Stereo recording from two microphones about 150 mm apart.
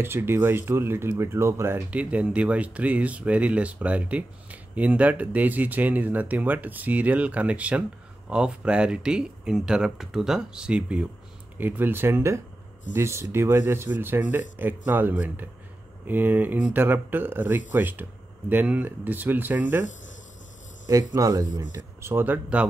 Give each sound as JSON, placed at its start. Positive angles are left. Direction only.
{"t": 0.0, "sound": "speech", "side_deg": -15}
{"t": 21.1, "sound": "speech", "side_deg": -25}